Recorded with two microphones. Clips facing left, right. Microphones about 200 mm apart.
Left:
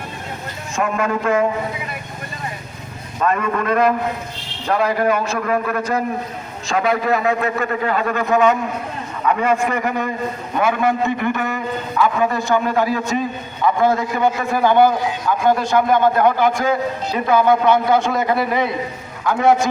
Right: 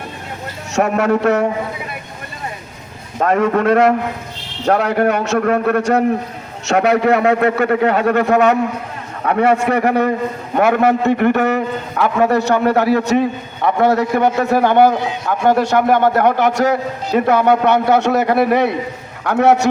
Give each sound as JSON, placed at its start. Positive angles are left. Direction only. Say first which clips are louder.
{"t": 0.7, "sound": "a man's voice", "louder": "right 6 dB", "side_deg": -70}
{"t": 3.2, "sound": "a man's voice", "louder": "right 5 dB", "side_deg": -70}